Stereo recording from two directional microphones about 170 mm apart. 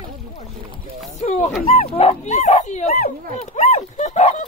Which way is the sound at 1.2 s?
40° left (ahead or behind).